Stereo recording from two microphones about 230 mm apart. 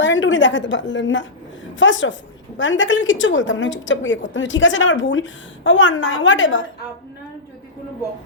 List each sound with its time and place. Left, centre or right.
0.0 s a woman's voice: left